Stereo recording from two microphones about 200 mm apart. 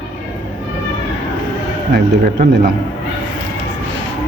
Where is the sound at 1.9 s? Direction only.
50° right (ahead or behind).